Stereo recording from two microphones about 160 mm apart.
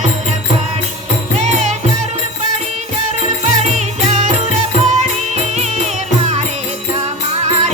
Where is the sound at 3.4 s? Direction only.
45° right (ahead or behind).